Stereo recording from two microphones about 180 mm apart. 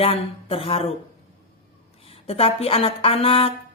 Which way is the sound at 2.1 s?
35° left (ahead or behind).